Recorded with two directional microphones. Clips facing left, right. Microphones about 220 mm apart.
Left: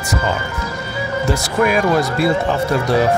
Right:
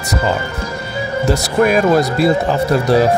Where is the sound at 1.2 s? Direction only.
40° right (ahead or behind).